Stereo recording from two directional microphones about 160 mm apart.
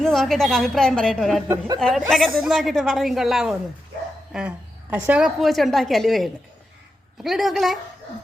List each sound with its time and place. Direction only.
0.0 s a woman's voice: 5° left (ahead or behind)
1.5 s speech: 25° right (ahead or behind)
2.0 s a woman's voice: centre (ahead or behind)
4.3 s a sound: 5° right (ahead or behind)
4.9 s a woman's voice: 10° right (ahead or behind)